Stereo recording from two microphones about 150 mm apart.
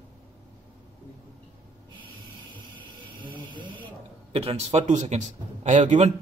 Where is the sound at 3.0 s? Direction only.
35° right (ahead or behind).